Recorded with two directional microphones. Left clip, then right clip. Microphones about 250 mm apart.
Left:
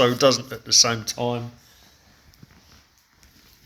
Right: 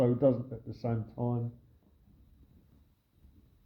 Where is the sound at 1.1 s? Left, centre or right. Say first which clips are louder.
Left 11 dB; left.